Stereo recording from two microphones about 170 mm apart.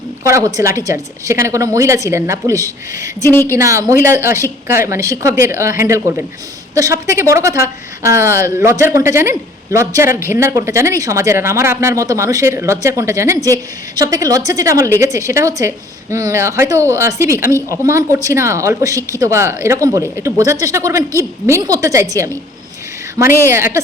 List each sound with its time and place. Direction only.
0.3 s speech: 20° right (ahead or behind)
3.2 s a woman's voice: 15° left (ahead or behind)
3.5 s speech: 15° right (ahead or behind)
23.1 s speech: 15° right (ahead or behind)